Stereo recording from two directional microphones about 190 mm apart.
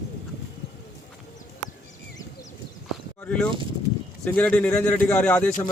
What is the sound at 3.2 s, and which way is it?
Speech, 5° left (ahead or behind).